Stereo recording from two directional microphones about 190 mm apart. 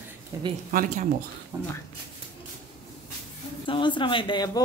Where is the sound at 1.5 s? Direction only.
15° right (ahead or behind).